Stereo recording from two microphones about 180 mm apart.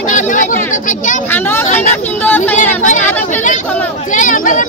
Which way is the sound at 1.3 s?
10° left (ahead or behind).